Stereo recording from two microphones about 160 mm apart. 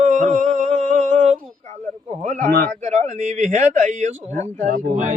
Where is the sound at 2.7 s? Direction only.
45° right (ahead or behind).